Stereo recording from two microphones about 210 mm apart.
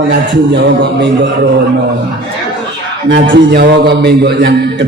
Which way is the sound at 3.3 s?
55° right (ahead or behind).